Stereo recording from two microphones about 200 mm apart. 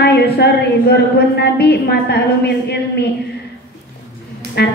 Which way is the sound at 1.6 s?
55° left (ahead or behind).